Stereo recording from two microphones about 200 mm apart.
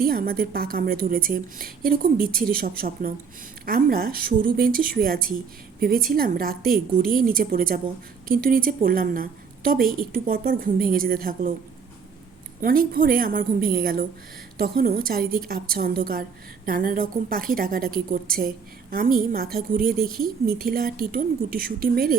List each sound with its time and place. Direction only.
0.0 s a woman's voice: 50° right (ahead or behind)
12.6 s a woman's voice: 45° right (ahead or behind)